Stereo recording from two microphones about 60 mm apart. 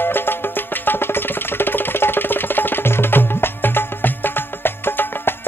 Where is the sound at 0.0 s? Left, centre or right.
Left.